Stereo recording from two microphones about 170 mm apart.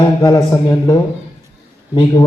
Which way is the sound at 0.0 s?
20° left (ahead or behind).